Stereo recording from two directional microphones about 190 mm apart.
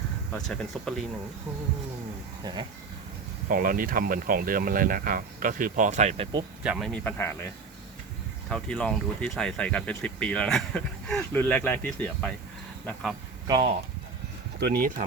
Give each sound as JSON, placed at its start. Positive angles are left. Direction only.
{"t": 0.3, "sound": "speech", "side_deg": 5}
{"t": 2.4, "sound": "speech", "side_deg": -25}
{"t": 3.5, "sound": "speech", "side_deg": -45}
{"t": 6.6, "sound": "speech", "side_deg": -5}
{"t": 8.4, "sound": "speech", "side_deg": 5}
{"t": 14.6, "sound": "speech", "side_deg": -50}